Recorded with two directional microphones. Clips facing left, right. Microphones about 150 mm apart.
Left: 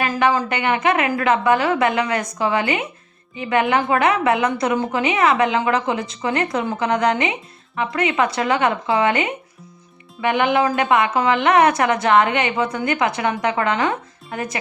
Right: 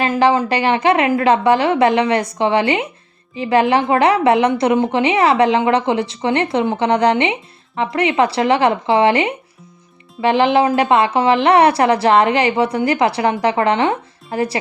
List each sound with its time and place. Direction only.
0.0 s a woman's voice: 30° right (ahead or behind)